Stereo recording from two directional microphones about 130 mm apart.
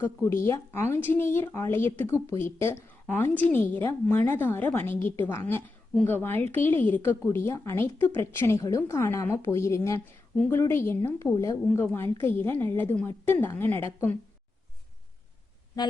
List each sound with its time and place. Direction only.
0.0 s a woman's voice: 20° left (ahead or behind)
10.3 s speech: 10° left (ahead or behind)
10.6 s a woman's voice: 20° left (ahead or behind)